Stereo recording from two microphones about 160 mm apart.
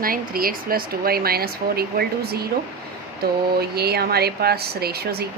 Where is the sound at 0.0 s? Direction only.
65° right (ahead or behind).